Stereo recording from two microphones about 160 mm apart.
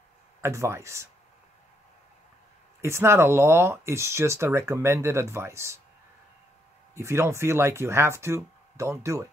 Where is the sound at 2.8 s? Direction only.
15° right (ahead or behind).